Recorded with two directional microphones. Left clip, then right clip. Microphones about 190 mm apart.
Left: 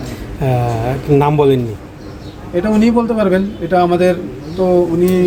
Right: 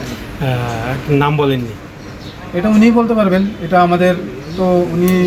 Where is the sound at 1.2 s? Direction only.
70° left (ahead or behind).